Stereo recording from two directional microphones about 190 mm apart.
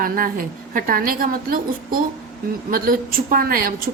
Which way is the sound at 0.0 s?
45° right (ahead or behind).